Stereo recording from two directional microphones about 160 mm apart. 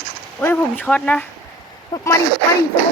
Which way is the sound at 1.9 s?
25° left (ahead or behind).